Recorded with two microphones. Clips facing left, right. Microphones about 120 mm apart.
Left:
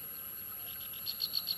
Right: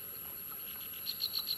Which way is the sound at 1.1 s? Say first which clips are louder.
Even; 25° left (ahead or behind).